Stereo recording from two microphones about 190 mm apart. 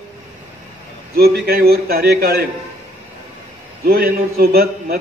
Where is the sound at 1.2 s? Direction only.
55° right (ahead or behind).